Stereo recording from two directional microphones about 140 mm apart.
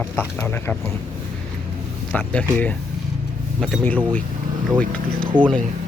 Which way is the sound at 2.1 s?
10° left (ahead or behind).